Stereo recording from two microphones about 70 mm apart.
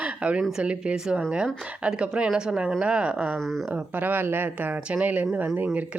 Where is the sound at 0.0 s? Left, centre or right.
Centre.